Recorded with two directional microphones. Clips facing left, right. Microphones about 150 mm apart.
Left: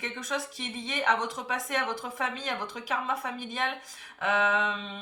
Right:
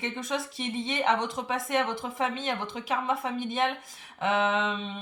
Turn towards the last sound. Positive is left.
turn(degrees=-25)  # may be behind; listen again after turning